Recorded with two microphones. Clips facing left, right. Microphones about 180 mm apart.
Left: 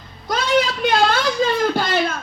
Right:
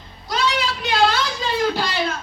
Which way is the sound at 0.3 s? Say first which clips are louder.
Left 4 dB; 50° left (ahead or behind).